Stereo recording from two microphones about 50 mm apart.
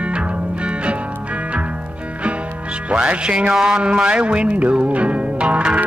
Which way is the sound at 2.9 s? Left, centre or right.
Right.